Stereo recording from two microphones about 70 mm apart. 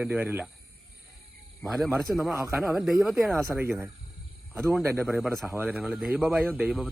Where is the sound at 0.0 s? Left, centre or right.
Centre.